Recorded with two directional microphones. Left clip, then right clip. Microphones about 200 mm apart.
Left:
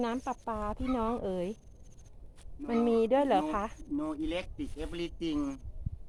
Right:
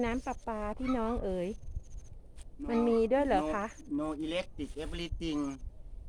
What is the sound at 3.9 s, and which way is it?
Speech, 55° right (ahead or behind).